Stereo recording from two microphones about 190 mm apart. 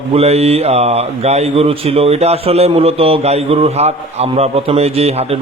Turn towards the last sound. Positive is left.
turn(degrees=-35)  # may be behind; listen again after turning